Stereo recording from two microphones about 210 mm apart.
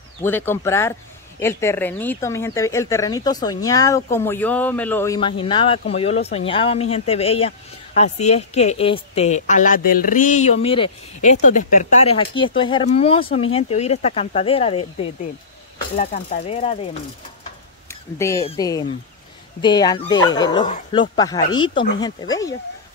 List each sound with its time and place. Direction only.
0.2 s speech: 10° left (ahead or behind); by 11.3 s 25° left (ahead or behind)
11.4 s speech: 40° left (ahead or behind)
18.1 s speech: 15° left (ahead or behind)